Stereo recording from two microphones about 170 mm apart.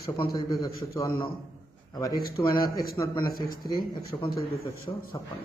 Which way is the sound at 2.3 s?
25° left (ahead or behind).